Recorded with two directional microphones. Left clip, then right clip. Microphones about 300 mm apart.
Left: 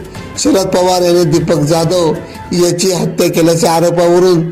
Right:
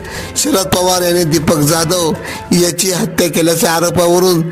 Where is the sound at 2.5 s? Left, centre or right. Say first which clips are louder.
Left 2 dB; right.